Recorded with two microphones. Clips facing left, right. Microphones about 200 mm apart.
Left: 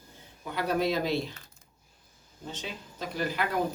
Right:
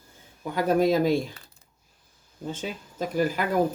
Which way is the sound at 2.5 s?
45° right (ahead or behind).